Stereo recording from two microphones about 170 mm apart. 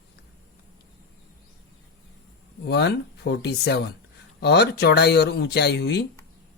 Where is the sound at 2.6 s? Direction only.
75° left (ahead or behind).